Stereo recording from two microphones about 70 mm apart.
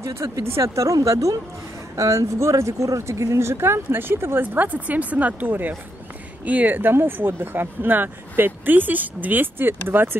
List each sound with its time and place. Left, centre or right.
0.0 s speech: right